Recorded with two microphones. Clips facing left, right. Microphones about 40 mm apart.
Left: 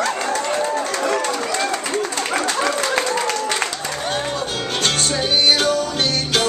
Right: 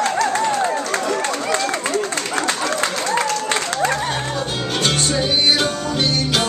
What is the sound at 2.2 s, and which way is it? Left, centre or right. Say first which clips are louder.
Speech: left 1 dB; left.